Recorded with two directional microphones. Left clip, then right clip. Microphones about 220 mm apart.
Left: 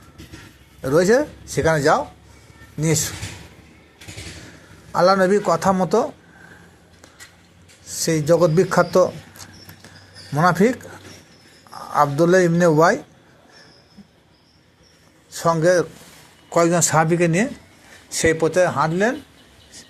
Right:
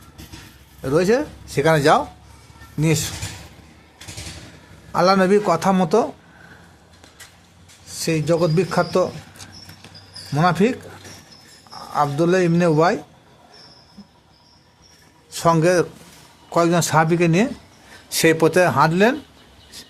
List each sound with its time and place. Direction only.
0.8 s speech: 5° right (ahead or behind)
4.9 s speech: 10° right (ahead or behind)
8.0 s a man's voice: 5° right (ahead or behind)
15.3 s a sound: 15° right (ahead or behind)
15.6 s speech: 15° right (ahead or behind)
16.5 s a man's voice: centre (ahead or behind)
18.1 s speech: 20° right (ahead or behind)